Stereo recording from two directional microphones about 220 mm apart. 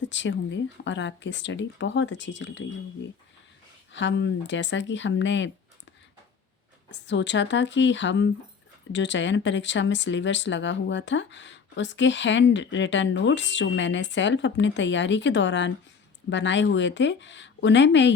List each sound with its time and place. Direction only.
0.0 s speech: 55° left (ahead or behind)
6.9 s speech: 55° left (ahead or behind)